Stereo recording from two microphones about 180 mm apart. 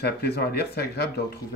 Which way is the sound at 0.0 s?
65° left (ahead or behind).